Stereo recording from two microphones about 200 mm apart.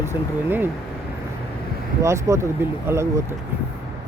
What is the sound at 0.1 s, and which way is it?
Speech, 10° right (ahead or behind).